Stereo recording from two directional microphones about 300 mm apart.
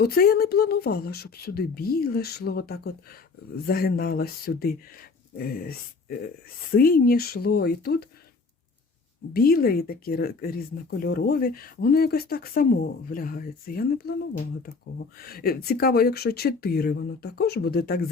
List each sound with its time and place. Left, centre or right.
0.0 s speech: left
9.3 s speech: left